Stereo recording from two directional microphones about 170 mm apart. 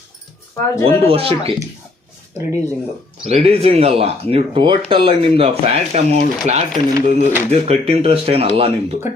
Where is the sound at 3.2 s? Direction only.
40° right (ahead or behind).